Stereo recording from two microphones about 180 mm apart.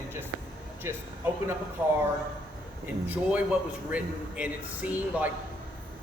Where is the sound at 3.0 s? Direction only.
10° right (ahead or behind).